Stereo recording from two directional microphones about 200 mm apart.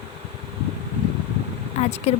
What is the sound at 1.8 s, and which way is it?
Speech, 35° left (ahead or behind).